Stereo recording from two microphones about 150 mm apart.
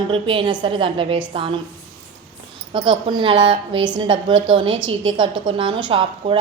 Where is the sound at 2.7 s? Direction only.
35° right (ahead or behind).